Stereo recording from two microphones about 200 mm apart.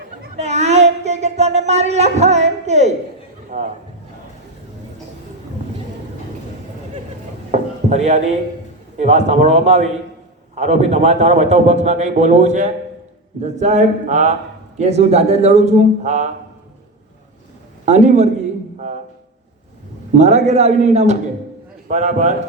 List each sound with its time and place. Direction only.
0.3 s a sound: 35° right (ahead or behind)
3.5 s a man's voice: 35° right (ahead or behind)
7.5 s a sound: 35° right (ahead or behind)
9.0 s a man's voice: 35° right (ahead or behind)
17.8 s a man's voice: 35° right (ahead or behind)
20.1 s a man's voice: 35° right (ahead or behind)